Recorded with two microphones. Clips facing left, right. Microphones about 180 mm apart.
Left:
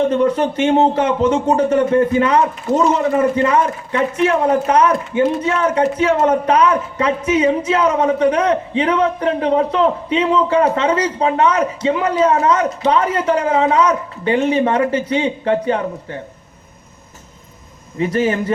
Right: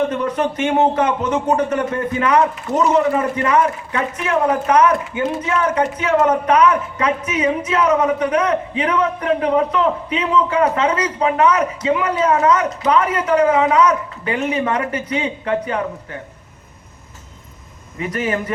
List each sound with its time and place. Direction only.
0.1 s speech: 30° left (ahead or behind)
17.9 s speech: 30° left (ahead or behind)